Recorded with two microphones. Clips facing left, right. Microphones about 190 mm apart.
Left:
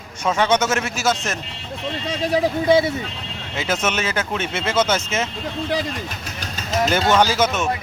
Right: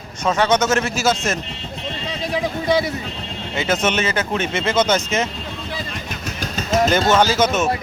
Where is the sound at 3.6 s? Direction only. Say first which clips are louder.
Right 3 dB; 5° left (ahead or behind).